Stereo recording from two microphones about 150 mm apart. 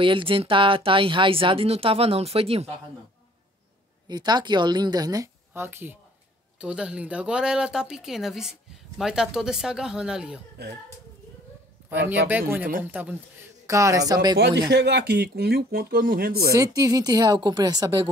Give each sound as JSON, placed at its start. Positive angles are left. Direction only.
{"t": 0.0, "sound": "speech", "side_deg": -35}
{"t": 4.1, "sound": "a woman's voice", "side_deg": -30}
{"t": 11.9, "sound": "speech", "side_deg": -10}
{"t": 14.7, "sound": "speech", "side_deg": -90}
{"t": 16.5, "sound": "a woman's voice", "side_deg": -25}